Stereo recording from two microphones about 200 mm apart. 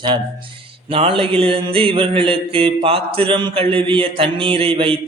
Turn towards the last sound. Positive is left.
turn(degrees=-25)  # may be behind; listen again after turning